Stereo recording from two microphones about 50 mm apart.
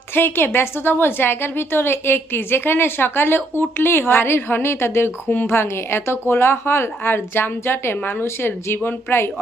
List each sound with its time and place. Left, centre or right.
0.1 s a woman's voice: left